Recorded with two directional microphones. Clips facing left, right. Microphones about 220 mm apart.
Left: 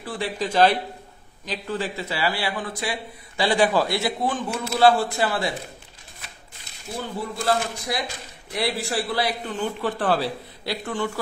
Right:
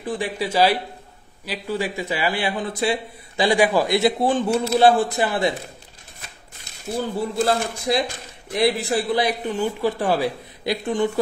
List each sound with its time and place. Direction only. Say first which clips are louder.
0.0 s a man's voice: right 2 dB; 15° right (ahead or behind)
3.4 s speech: right 2 dB; 10° right (ahead or behind); by 4.7 s 30° right (ahead or behind)
4.7 s speech: right 1 dB; 20° right (ahead or behind)
7.0 s a man's voice: right 7 dB; 25° right (ahead or behind)